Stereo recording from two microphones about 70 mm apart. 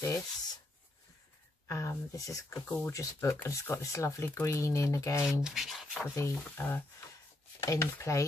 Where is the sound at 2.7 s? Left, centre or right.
Left.